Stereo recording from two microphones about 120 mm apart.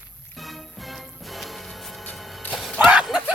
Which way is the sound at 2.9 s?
5° right (ahead or behind).